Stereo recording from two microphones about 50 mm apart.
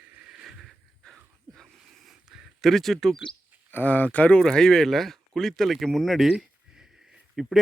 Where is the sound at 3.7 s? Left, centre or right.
Left.